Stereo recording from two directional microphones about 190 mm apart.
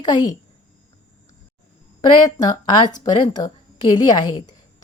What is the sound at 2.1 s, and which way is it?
A woman's voice, 25° left (ahead or behind).